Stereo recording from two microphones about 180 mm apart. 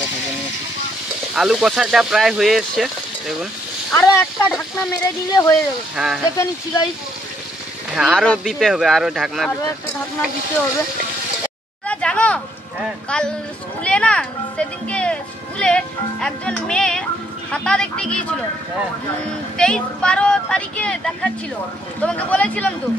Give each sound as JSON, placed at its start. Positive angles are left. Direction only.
{"t": 1.3, "sound": "speech", "side_deg": -5}
{"t": 3.9, "sound": "speech", "side_deg": 15}
{"t": 5.9, "sound": "speech", "side_deg": -5}
{"t": 6.3, "sound": "speech", "side_deg": 20}
{"t": 7.9, "sound": "speech", "side_deg": 0}
{"t": 11.9, "sound": "a sound", "side_deg": 5}
{"t": 13.8, "sound": "music", "side_deg": 5}
{"t": 15.6, "sound": "speech", "side_deg": 5}
{"t": 19.5, "sound": "speech", "side_deg": 5}